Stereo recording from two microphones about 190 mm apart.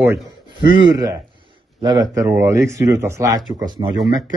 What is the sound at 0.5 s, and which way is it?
A man's voice, 25° right (ahead or behind).